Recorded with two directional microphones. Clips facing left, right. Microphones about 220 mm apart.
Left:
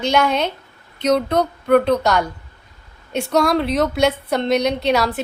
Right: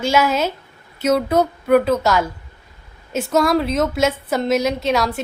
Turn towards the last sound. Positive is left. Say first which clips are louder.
# left 1 dB
turn(degrees=0)  # may be behind; listen again after turning